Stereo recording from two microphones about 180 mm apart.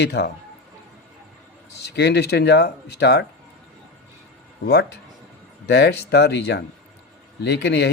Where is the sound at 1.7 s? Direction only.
65° left (ahead or behind).